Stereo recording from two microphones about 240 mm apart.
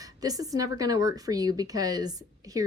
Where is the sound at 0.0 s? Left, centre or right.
Centre.